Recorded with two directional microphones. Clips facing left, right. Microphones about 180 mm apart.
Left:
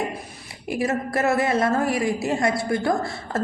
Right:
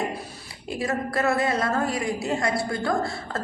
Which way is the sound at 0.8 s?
25° left (ahead or behind).